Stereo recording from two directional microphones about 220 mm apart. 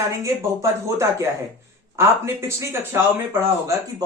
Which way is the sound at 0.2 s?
15° right (ahead or behind).